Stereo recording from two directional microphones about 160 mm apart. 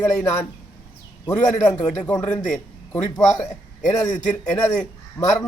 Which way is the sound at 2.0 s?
10° left (ahead or behind).